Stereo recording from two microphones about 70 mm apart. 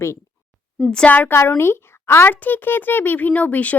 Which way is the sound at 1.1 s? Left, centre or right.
Left.